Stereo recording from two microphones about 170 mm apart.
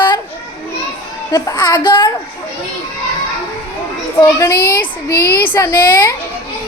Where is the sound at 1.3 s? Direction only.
20° left (ahead or behind).